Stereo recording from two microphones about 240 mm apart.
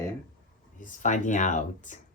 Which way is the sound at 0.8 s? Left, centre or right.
Left.